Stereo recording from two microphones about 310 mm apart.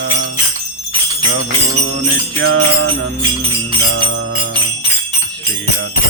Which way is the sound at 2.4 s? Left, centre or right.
Right.